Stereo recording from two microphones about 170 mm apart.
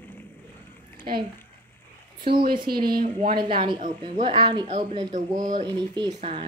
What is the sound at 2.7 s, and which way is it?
Speech, 60° right (ahead or behind).